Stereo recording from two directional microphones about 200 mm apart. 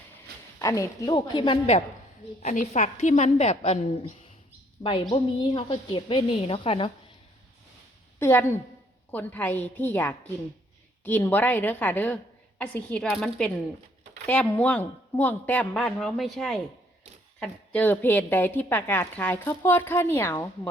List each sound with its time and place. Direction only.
0.6 s a woman's voice: 15° left (ahead or behind)
2.4 s a woman's voice: 40° left (ahead or behind)
8.2 s a woman's voice: 10° left (ahead or behind)